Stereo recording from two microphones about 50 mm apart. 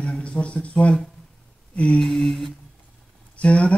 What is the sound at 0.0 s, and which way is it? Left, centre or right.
Speech, left.